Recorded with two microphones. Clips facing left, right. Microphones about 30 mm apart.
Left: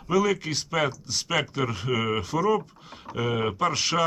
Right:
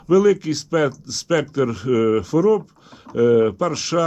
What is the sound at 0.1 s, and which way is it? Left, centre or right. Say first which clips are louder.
Speech: right 8 dB; centre.